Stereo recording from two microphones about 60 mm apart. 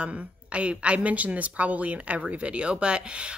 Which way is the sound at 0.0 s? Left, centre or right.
Centre.